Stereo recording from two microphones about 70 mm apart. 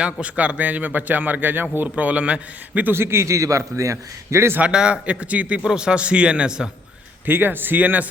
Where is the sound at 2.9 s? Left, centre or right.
Right.